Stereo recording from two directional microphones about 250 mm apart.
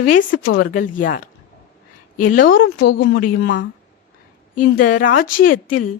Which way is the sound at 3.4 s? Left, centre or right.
Left.